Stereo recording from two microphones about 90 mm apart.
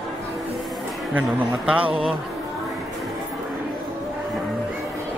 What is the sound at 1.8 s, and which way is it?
Speech, 90° right.